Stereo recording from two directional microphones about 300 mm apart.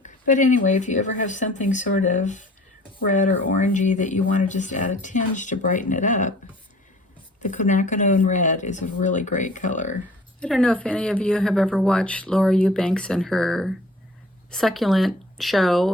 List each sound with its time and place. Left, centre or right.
0.0 s speech: left
7.4 s speech: left
10.4 s speech: centre